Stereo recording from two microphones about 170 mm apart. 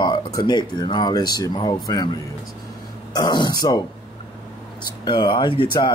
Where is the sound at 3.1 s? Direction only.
25° left (ahead or behind).